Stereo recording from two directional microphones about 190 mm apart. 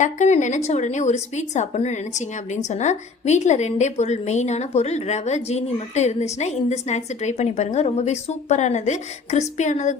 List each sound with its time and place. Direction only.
0.0 s a woman's voice: 40° left (ahead or behind)